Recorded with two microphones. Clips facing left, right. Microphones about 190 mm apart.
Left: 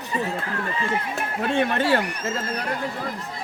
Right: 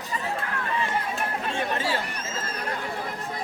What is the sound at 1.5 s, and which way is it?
Speech, 65° left (ahead or behind).